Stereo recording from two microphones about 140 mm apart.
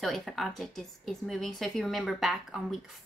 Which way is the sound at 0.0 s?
Centre (ahead or behind).